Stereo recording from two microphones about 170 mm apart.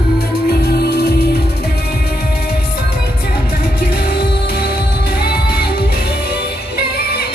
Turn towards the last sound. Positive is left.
turn(degrees=65)  # may be behind; listen again after turning